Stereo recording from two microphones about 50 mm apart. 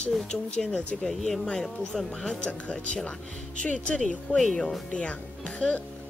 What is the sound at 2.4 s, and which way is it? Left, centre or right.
Speech, left.